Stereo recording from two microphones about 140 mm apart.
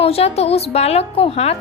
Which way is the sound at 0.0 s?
45° left (ahead or behind).